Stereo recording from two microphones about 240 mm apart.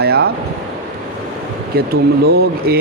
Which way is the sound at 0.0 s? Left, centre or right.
Right.